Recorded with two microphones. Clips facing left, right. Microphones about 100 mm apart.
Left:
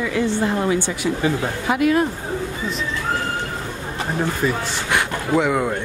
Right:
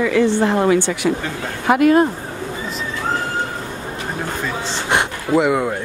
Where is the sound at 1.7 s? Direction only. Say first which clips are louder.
Right 5 dB; 50° right (ahead or behind).